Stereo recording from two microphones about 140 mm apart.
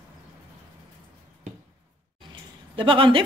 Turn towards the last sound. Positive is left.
turn(degrees=-40)  # may be behind; listen again after turning